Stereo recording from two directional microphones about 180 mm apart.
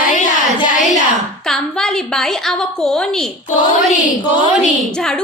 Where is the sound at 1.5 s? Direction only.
5° left (ahead or behind).